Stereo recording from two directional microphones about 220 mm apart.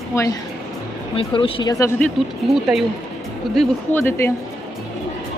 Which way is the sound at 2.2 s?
Centre (ahead or behind).